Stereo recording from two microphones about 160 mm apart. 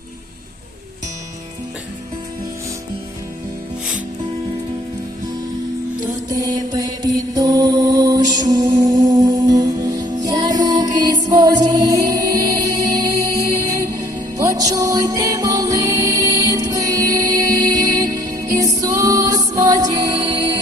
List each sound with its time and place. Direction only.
6.3 s mantra: 25° right (ahead or behind)
14.3 s music: 20° right (ahead or behind)